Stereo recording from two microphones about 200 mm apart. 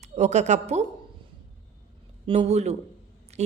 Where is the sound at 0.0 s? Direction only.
35° right (ahead or behind).